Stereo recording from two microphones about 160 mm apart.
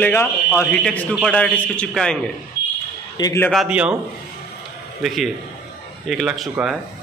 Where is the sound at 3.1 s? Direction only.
20° left (ahead or behind).